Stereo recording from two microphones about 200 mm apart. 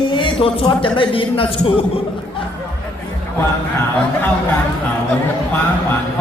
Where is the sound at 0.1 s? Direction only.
25° left (ahead or behind).